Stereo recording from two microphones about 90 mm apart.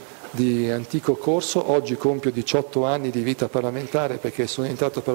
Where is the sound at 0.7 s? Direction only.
10° left (ahead or behind).